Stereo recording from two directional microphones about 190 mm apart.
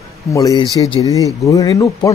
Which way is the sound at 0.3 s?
20° left (ahead or behind).